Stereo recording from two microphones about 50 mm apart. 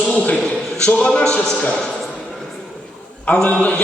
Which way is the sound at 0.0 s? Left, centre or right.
Left.